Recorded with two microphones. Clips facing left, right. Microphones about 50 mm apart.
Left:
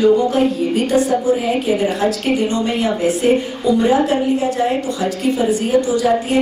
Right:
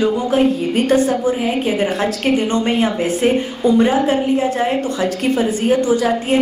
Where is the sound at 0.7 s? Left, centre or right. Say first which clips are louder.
Right 1 dB; right.